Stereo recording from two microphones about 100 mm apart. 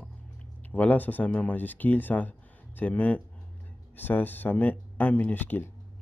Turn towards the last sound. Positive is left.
turn(degrees=20)  # may be behind; listen again after turning